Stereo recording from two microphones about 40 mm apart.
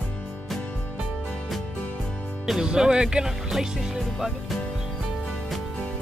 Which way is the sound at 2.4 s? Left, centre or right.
Centre.